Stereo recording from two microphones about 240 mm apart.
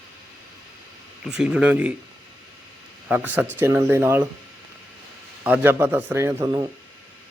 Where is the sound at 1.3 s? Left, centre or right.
Centre.